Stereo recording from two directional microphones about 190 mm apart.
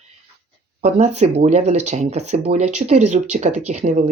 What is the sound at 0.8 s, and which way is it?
Speech, 35° right (ahead or behind).